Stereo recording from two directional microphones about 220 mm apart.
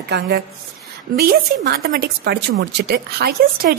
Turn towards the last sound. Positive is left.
turn(degrees=-45)  # may be behind; listen again after turning